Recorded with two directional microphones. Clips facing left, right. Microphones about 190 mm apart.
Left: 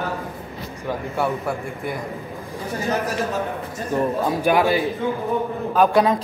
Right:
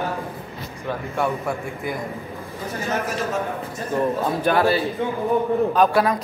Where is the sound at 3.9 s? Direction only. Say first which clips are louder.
Left 1 dB; 10° left (ahead or behind).